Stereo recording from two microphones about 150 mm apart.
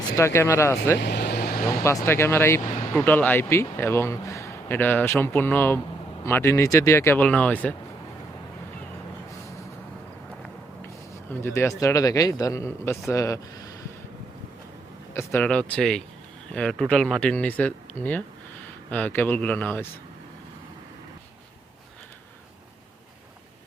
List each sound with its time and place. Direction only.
0.2 s speech: 20° left (ahead or behind)
1.2 s vehicle: 90° left
2.0 s speech: 15° left (ahead or behind)
11.3 s a man's voice: 15° left (ahead or behind)
15.1 s speech: 15° left (ahead or behind)